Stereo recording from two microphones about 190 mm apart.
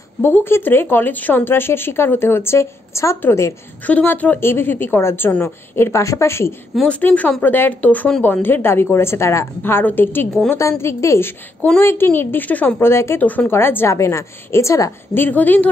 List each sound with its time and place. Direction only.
0.2 s speech: 10° left (ahead or behind)
6.7 s speech: 5° left (ahead or behind)